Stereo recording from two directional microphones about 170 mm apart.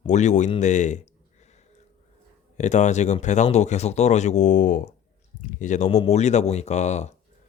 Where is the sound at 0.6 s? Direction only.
45° left (ahead or behind).